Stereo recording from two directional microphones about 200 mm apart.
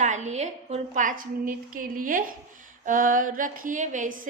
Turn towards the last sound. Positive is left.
turn(degrees=-40)  # may be behind; listen again after turning